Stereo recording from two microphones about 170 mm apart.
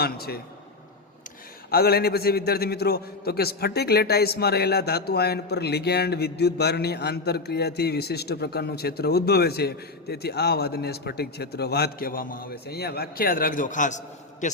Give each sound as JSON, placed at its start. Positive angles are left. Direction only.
{"t": 0.0, "sound": "a man's voice", "side_deg": 65}
{"t": 1.7, "sound": "a man's voice", "side_deg": 65}